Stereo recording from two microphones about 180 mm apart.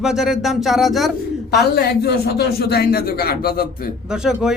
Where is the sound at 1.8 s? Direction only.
65° left (ahead or behind).